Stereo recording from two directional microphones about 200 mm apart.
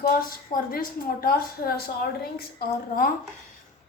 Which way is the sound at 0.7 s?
50° left (ahead or behind).